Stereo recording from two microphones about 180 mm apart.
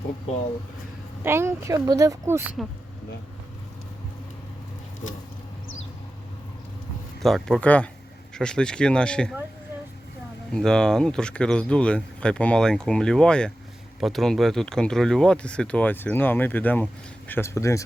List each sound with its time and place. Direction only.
1.2 s a child's voice: 15° right (ahead or behind)
7.2 s speech: centre (ahead or behind)
10.5 s speech: 5° left (ahead or behind)